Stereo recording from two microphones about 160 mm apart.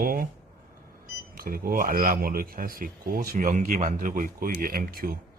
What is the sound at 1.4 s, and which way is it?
A man's voice, 65° right (ahead or behind).